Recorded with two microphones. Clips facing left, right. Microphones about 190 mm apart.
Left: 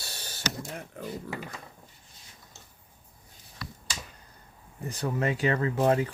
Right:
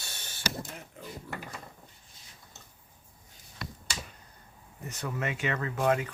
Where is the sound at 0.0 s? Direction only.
35° left (ahead or behind).